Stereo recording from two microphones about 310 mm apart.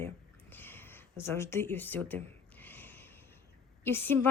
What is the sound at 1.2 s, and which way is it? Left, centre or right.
Speech, centre.